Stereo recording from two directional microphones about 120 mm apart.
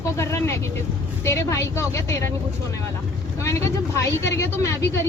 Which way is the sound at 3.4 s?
25° left (ahead or behind).